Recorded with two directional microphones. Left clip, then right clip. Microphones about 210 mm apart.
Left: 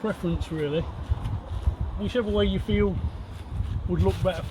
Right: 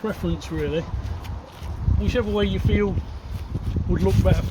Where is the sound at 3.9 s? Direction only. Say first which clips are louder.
Right 3 dB; 20° right (ahead or behind).